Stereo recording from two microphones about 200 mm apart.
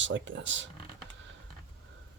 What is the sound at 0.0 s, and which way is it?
Speech, 70° right (ahead or behind).